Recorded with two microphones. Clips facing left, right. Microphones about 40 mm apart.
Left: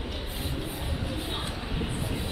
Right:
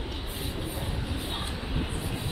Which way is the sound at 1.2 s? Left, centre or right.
Centre.